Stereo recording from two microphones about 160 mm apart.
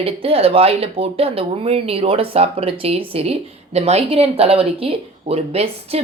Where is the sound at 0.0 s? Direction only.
35° right (ahead or behind).